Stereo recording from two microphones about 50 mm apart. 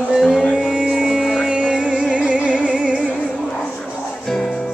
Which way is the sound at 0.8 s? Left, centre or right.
Centre.